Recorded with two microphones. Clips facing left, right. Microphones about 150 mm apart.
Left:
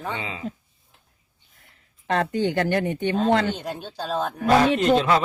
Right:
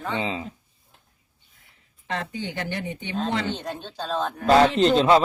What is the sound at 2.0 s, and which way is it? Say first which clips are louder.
Speech: left 8 dB; 60° left (ahead or behind).